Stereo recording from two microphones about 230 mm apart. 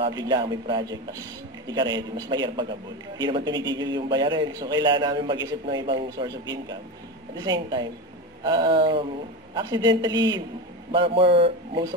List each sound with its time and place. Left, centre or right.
0.0 s a man's voice: centre